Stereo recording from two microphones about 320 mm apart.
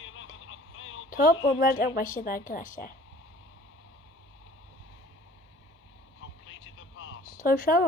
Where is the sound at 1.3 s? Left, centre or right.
Centre.